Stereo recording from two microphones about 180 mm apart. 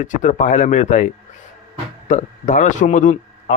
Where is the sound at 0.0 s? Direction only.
45° left (ahead or behind).